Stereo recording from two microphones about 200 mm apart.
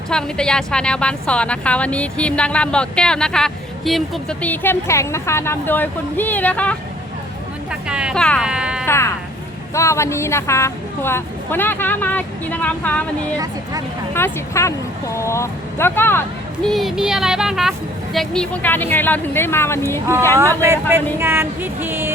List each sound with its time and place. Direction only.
0.1 s a woman's voice: 5° left (ahead or behind)
7.7 s a sound: 5° right (ahead or behind)
9.7 s a woman's voice: 15° left (ahead or behind)
13.3 s speech: 15° right (ahead or behind)
14.1 s a woman's voice: 15° left (ahead or behind)
16.6 s a woman's voice: centre (ahead or behind)
20.6 s speech: 15° right (ahead or behind)